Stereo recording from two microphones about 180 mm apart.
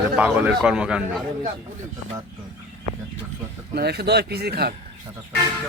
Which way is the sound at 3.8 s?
65° right (ahead or behind).